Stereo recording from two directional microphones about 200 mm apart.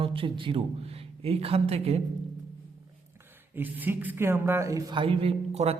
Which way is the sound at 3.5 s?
10° right (ahead or behind).